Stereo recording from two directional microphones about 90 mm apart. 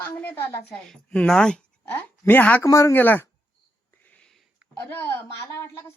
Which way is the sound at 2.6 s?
35° left (ahead or behind).